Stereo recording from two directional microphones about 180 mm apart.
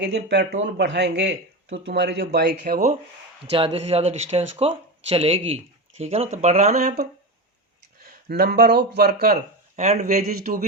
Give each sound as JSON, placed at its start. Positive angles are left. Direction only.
{"t": 0.0, "sound": "speech", "side_deg": -70}
{"t": 2.6, "sound": "a man's voice", "side_deg": -45}
{"t": 3.5, "sound": "speech", "side_deg": -35}
{"t": 6.7, "sound": "speech", "side_deg": -60}
{"t": 8.3, "sound": "speech", "side_deg": -60}
{"t": 9.7, "sound": "speech", "side_deg": -40}
{"t": 10.2, "sound": "a man's voice", "side_deg": -50}